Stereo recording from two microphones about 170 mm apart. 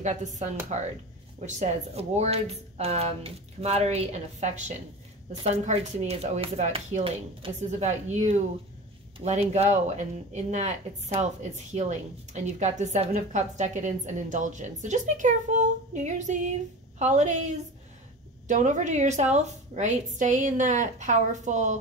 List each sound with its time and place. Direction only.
0.0 s speech: 45° right (ahead or behind)